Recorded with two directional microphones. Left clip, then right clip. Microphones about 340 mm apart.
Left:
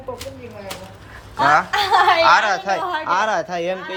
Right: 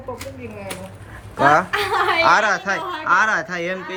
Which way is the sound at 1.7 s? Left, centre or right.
Centre.